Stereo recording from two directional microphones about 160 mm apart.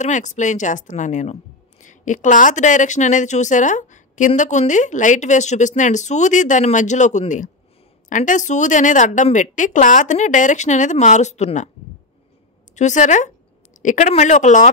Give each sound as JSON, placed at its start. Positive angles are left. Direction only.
{"t": 0.0, "sound": "a woman's voice", "side_deg": 50}
{"t": 12.7, "sound": "a woman's voice", "side_deg": 50}